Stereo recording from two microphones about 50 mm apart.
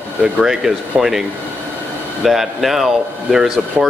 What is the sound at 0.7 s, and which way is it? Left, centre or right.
Speech, centre.